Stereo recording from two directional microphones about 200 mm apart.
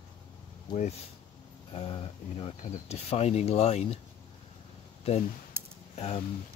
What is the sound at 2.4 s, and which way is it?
Speech, 30° left (ahead or behind).